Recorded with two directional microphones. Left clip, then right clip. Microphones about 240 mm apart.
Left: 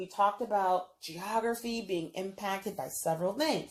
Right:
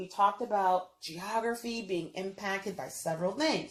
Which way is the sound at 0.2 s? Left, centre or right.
Left.